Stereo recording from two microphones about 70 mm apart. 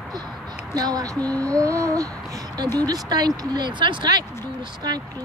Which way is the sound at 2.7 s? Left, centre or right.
Right.